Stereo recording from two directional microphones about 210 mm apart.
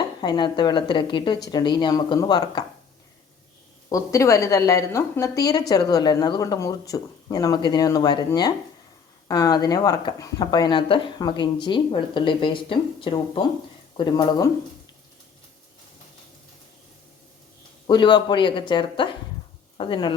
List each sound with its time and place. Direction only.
0.2 s speech: 20° left (ahead or behind)
3.8 s a woman's voice: 15° left (ahead or behind)
17.8 s speech: 20° left (ahead or behind)